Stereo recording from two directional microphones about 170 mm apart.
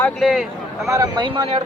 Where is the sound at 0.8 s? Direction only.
20° right (ahead or behind).